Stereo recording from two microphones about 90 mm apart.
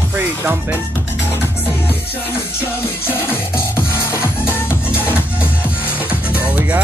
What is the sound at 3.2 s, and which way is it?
Music, 25° left (ahead or behind).